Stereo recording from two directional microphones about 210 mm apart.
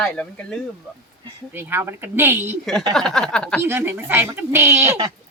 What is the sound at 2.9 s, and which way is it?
Speech, centre (ahead or behind).